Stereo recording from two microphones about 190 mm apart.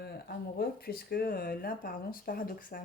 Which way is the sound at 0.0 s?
55° left (ahead or behind).